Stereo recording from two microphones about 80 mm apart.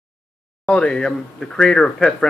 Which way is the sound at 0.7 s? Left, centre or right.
Centre.